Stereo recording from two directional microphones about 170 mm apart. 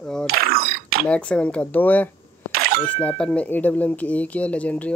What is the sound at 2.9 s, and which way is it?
Speech, 5° left (ahead or behind).